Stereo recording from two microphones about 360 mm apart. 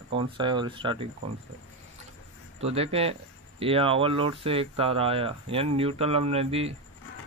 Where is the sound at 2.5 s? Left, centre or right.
Centre.